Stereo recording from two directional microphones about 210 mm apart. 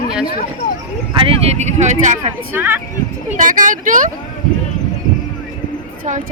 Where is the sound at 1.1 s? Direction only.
25° right (ahead or behind).